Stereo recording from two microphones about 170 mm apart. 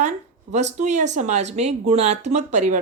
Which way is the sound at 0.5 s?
45° right (ahead or behind).